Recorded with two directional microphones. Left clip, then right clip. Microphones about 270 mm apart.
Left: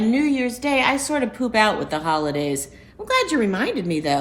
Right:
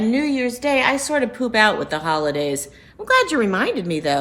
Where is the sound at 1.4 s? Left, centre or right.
Right.